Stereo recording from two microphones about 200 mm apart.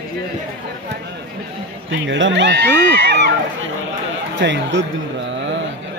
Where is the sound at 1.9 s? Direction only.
70° right (ahead or behind).